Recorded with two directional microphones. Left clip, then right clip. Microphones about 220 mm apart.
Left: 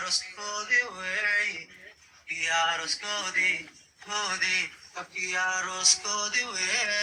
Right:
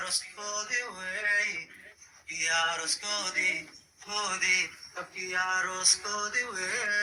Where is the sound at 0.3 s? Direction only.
25° left (ahead or behind).